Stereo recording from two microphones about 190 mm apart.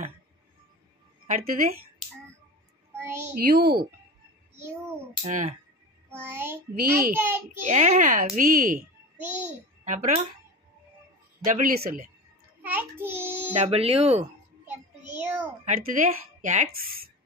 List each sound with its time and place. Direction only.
1.2 s speech: 50° right (ahead or behind)
3.0 s a child's voice: 10° right (ahead or behind)
3.3 s speech: 55° right (ahead or behind)
5.2 s a child's voice: 40° right (ahead or behind)
6.2 s a child's voice: 10° right (ahead or behind)
7.6 s a child's voice: 40° right (ahead or behind)
9.2 s a child's voice: 10° right (ahead or behind)
9.8 s a child's voice: 40° right (ahead or behind)
11.4 s speech: 45° right (ahead or behind)
12.6 s a child's voice: 10° right (ahead or behind)
13.6 s a child's voice: 30° right (ahead or behind)
14.7 s child singing: 10° right (ahead or behind)
15.6 s speech: 40° right (ahead or behind)